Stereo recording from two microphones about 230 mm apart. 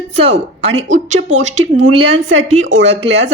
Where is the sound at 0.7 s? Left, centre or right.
Right.